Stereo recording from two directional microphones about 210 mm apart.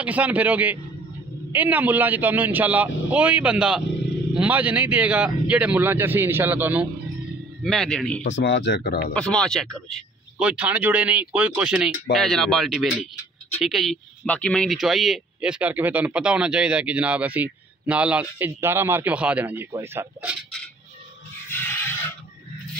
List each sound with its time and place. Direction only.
0.0 s speech: 5° right (ahead or behind)
7.6 s speech: centre (ahead or behind)
8.3 s speech: 60° left (ahead or behind)
9.1 s speech: 5° left (ahead or behind); by 20.3 s 10° right (ahead or behind)
21.5 s a sound: 10° left (ahead or behind)